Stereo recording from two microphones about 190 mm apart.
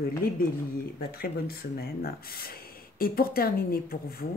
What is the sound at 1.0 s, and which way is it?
Speech, 55° left (ahead or behind).